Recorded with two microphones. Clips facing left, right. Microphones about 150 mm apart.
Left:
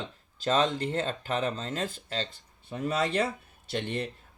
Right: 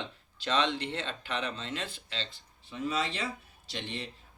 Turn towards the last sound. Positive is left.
turn(degrees=55)  # may be behind; listen again after turning